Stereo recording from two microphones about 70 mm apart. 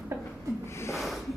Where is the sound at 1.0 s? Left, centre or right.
Centre.